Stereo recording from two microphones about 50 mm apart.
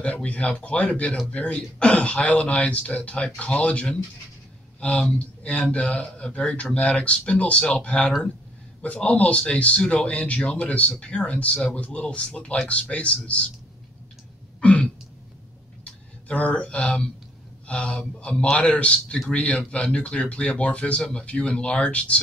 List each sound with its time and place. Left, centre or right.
0.0 s speech: left
14.6 s throat clearing: left
15.8 s a sound: left
17.6 s speech: left